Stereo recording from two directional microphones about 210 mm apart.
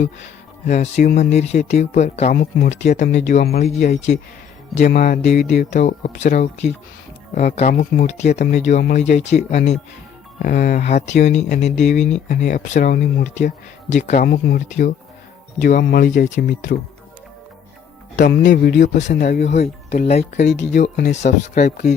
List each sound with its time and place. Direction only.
0.6 s speech: 35° left (ahead or behind)
18.2 s speech: 45° left (ahead or behind)
19.5 s speech: 30° left (ahead or behind)
20.6 s speech: 55° left (ahead or behind)
21.1 s speech: 35° left (ahead or behind)